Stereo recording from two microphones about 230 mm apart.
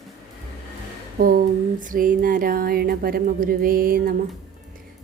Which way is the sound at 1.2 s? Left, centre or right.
Right.